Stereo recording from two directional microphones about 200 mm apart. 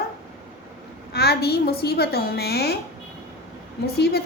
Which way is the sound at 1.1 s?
55° left (ahead or behind).